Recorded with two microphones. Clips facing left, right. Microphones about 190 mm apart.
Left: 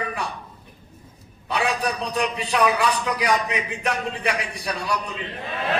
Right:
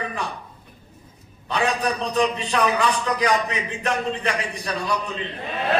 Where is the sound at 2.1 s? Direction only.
10° left (ahead or behind).